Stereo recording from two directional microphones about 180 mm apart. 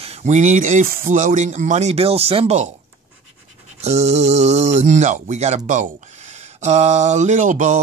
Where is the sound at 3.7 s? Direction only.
40° right (ahead or behind).